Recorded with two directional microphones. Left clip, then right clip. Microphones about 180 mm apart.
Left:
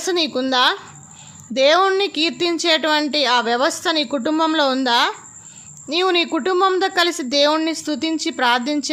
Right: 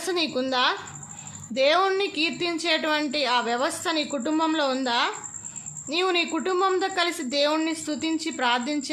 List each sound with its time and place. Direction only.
0.0 s a woman's voice: 35° left (ahead or behind)